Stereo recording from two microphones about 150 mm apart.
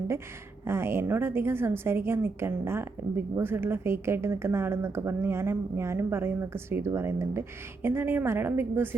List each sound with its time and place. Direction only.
0.6 s a woman's voice: 15° right (ahead or behind)